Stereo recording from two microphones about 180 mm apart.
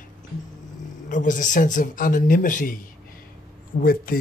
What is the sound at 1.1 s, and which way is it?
Speech, 45° left (ahead or behind).